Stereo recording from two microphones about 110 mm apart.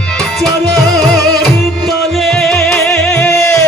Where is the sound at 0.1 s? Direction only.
5° left (ahead or behind).